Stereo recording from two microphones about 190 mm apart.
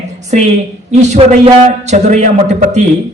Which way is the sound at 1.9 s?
40° right (ahead or behind).